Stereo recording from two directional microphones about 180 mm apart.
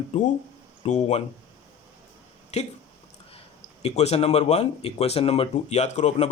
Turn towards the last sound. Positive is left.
turn(degrees=40)  # may be behind; listen again after turning